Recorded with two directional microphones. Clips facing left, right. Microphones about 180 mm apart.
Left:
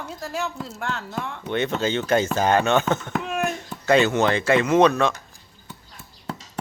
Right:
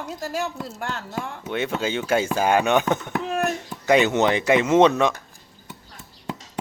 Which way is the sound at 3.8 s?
15° right (ahead or behind).